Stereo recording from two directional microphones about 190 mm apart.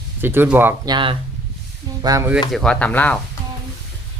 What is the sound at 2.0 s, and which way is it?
Speech, 15° right (ahead or behind).